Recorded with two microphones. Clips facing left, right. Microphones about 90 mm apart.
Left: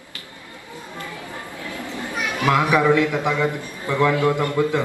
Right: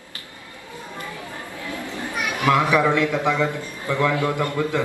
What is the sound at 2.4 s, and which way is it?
A man's voice, 20° left (ahead or behind).